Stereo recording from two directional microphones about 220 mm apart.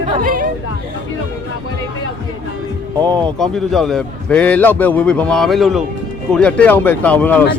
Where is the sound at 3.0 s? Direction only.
20° right (ahead or behind).